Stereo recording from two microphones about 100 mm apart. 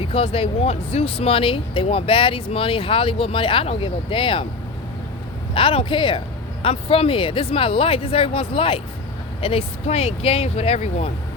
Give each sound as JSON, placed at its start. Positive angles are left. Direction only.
{"t": 0.0, "sound": "speech", "side_deg": 70}
{"t": 5.5, "sound": "speech", "side_deg": 60}